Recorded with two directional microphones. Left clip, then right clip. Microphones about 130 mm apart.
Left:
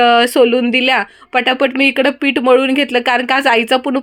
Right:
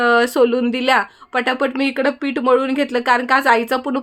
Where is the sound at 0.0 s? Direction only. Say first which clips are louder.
Left 4 dB; 30° left (ahead or behind).